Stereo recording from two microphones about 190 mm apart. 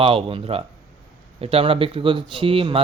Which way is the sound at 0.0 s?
30° right (ahead or behind).